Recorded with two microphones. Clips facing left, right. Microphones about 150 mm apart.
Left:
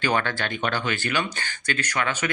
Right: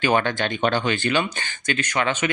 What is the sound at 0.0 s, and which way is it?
Speech, 15° right (ahead or behind).